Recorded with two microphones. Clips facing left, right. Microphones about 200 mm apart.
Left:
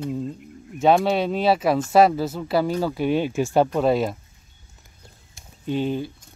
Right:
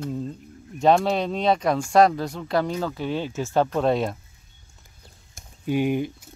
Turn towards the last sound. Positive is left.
turn(degrees=-15)  # may be behind; listen again after turning